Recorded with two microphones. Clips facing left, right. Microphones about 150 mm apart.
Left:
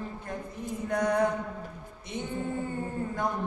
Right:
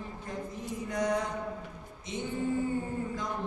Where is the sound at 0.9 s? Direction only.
60° left (ahead or behind).